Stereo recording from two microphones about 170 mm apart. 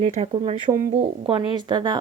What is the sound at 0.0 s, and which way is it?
Speech, 35° right (ahead or behind).